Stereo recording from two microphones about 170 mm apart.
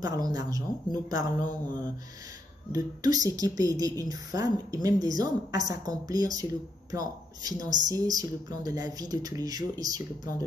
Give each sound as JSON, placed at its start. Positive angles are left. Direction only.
{"t": 0.0, "sound": "speech", "side_deg": -20}